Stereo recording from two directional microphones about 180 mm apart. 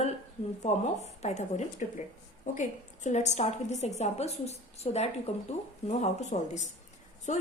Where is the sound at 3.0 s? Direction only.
40° left (ahead or behind).